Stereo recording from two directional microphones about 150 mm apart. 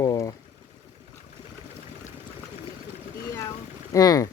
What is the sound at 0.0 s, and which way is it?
Boiling, 25° left (ahead or behind).